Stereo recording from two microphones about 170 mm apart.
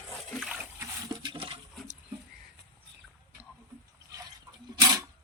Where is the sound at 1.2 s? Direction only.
30° right (ahead or behind).